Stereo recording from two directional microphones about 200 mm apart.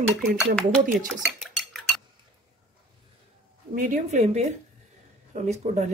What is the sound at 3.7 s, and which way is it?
Speech, 40° right (ahead or behind).